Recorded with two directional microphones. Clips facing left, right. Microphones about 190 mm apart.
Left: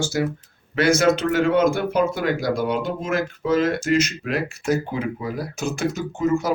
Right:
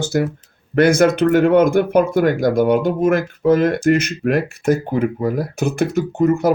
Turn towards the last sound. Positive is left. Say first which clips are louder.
# right 6 dB
turn(degrees=-60)  # may be behind; listen again after turning